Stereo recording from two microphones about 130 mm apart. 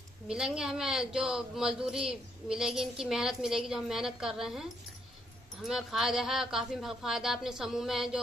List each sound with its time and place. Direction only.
0.3 s a man's voice: 5° right (ahead or behind)